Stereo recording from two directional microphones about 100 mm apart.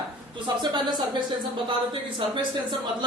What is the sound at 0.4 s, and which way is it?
A woman's voice, 45° right (ahead or behind).